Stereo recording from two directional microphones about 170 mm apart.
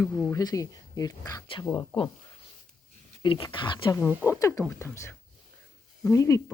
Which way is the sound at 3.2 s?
30° left (ahead or behind).